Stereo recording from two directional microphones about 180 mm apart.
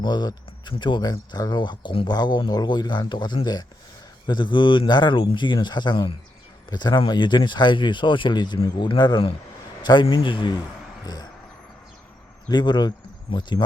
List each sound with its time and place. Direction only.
0.0 s speech: 25° left (ahead or behind)
11.0 s vehicle: 20° left (ahead or behind)
12.5 s speech: 25° left (ahead or behind)